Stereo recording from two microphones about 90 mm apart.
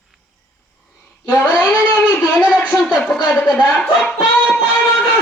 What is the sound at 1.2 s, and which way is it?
A woman's voice, 20° left (ahead or behind).